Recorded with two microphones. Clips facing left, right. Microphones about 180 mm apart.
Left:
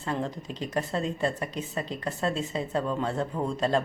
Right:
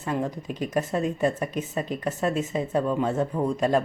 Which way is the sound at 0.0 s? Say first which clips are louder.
Right 3 dB; 15° right (ahead or behind).